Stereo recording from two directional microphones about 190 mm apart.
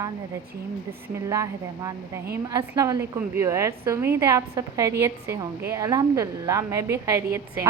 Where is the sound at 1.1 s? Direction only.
15° right (ahead or behind).